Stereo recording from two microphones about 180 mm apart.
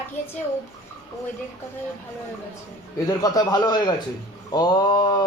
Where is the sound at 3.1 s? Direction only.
20° left (ahead or behind).